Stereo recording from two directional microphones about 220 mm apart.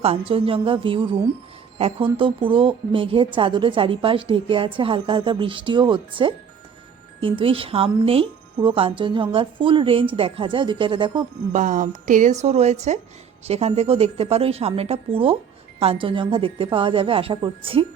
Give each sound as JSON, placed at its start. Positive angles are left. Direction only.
{"t": 0.0, "sound": "a woman's voice", "side_deg": -25}
{"t": 11.5, "sound": "a woman's voice", "side_deg": -35}